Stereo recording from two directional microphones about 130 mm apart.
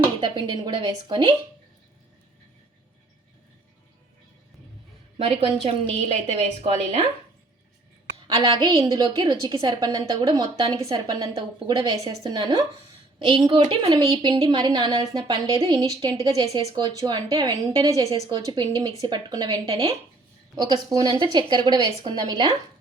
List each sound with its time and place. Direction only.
0.2 s a woman's voice: 35° right (ahead or behind)
5.1 s a woman's voice: 45° right (ahead or behind)
8.3 s a woman's voice: 40° right (ahead or behind)